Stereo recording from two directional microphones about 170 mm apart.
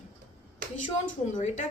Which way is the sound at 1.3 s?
45° left (ahead or behind).